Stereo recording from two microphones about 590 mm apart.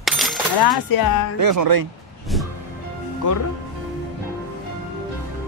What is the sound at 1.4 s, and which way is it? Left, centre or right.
Speech, right.